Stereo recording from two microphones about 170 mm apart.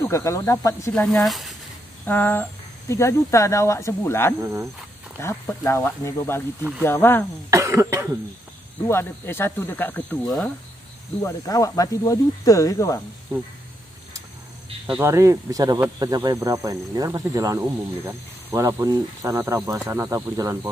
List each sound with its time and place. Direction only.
0.0 s speech: 20° left (ahead or behind)
0.9 s speech: centre (ahead or behind)
2.0 s speech: 10° left (ahead or behind)
4.4 s speech: 15° right (ahead or behind)
5.2 s speech: 15° left (ahead or behind)
7.5 s cough: 15° right (ahead or behind)
8.8 s speech: 15° left (ahead or behind)
11.2 s speech: 20° left (ahead or behind)
15.0 s speech: 15° right (ahead or behind)